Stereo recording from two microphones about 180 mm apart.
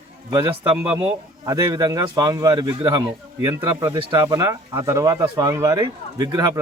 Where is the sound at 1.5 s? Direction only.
20° right (ahead or behind).